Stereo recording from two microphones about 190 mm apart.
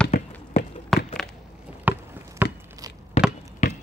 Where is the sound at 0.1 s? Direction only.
35° left (ahead or behind).